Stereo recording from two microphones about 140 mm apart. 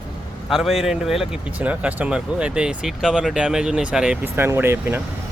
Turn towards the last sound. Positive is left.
turn(degrees=-15)  # may be behind; listen again after turning